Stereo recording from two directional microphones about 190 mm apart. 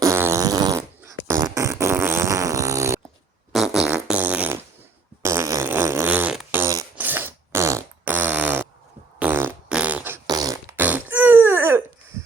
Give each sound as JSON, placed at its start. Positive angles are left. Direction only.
{"t": 0.0, "sound": "fart", "side_deg": -15}
{"t": 3.5, "sound": "fart", "side_deg": 0}